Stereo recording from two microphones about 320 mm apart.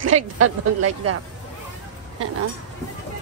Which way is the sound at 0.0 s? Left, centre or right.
Right.